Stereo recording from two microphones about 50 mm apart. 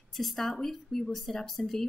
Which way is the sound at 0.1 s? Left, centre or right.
Centre.